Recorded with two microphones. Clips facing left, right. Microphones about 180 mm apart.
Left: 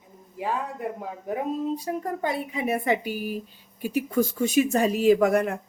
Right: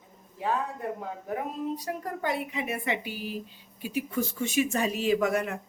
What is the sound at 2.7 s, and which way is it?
Speech, 40° left (ahead or behind).